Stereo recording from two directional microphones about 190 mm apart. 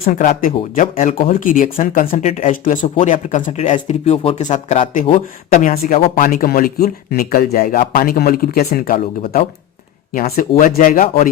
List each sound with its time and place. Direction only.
0.0 s speech: 40° left (ahead or behind)
5.7 s speech: 50° left (ahead or behind)